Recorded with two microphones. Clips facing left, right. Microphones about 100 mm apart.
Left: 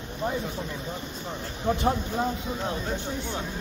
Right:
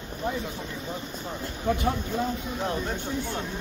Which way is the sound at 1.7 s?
25° left (ahead or behind).